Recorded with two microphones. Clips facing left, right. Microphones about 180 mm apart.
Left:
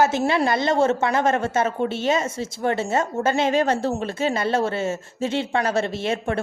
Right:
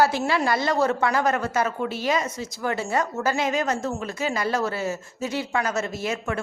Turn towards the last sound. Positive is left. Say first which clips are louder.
# left 4 dB
turn(degrees=30)  # may be behind; listen again after turning